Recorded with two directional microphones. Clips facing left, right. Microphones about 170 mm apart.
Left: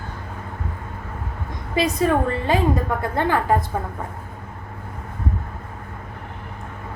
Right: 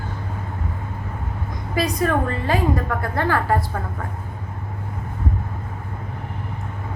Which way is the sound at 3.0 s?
20° left (ahead or behind).